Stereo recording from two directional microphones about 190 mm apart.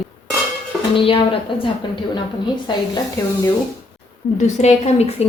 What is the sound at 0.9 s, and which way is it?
Speech, 30° left (ahead or behind).